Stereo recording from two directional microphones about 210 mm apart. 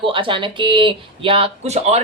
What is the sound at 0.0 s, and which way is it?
A man's voice, 25° right (ahead or behind).